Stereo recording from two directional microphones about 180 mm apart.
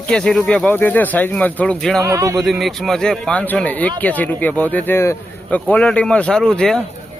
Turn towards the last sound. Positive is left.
turn(degrees=5)  # may be behind; listen again after turning